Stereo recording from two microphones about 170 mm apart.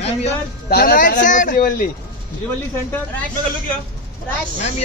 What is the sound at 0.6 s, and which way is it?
Speech, 60° left (ahead or behind).